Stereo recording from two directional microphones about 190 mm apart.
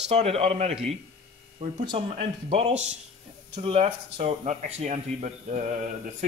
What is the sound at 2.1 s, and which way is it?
Speech, 30° right (ahead or behind).